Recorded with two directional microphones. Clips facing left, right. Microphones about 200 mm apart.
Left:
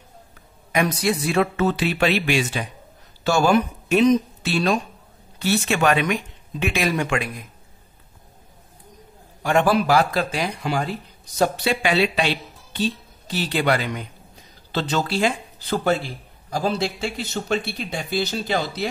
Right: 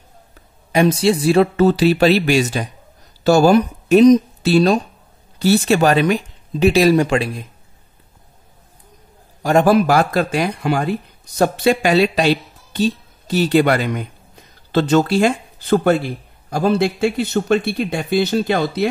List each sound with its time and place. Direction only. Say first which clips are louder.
0.7 s speech: right 7 dB; 30° right (ahead or behind)
9.4 s speech: right 5 dB; 40° right (ahead or behind); by 18.9 s 55° right (ahead or behind)